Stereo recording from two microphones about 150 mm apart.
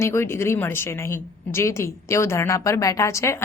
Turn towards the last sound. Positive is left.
turn(degrees=20)  # may be behind; listen again after turning